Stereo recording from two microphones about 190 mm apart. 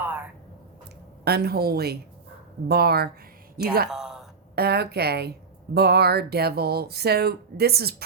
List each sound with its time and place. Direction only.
0.0 s a sound: 10° right (ahead or behind)
1.2 s speech: 55° right (ahead or behind)
3.8 s a woman's voice: centre (ahead or behind)
4.5 s speech: 55° right (ahead or behind)